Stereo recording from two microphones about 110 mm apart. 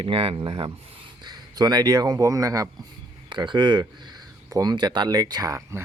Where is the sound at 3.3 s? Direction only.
45° right (ahead or behind); by 5.8 s 30° right (ahead or behind).